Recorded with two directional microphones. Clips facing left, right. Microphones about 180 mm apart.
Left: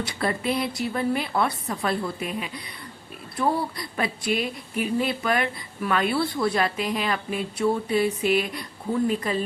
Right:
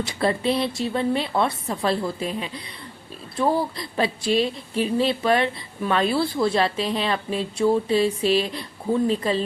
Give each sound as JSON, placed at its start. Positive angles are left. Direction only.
{"t": 0.1, "sound": "speech", "side_deg": -30}